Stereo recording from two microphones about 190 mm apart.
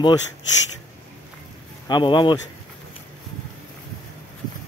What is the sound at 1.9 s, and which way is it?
Speech, 25° left (ahead or behind).